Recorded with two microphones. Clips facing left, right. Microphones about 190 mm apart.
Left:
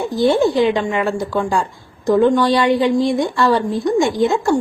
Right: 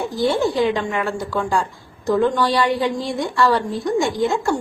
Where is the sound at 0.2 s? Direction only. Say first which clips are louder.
Left 4 dB; 20° left (ahead or behind).